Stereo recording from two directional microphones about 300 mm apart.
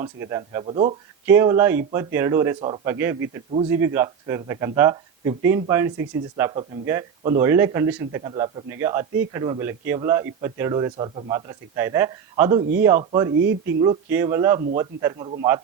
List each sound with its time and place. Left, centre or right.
0.0 s speech: centre